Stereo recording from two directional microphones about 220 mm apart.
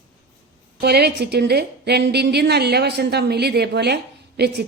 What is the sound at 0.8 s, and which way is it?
A woman's voice, 45° right (ahead or behind).